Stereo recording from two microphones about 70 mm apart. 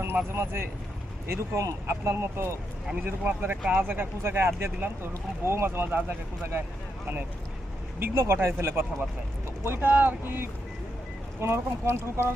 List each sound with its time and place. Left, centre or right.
0.0 s speech: right
7.9 s speech: right